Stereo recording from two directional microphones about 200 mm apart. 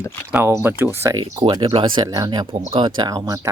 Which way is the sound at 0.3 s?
10° right (ahead or behind).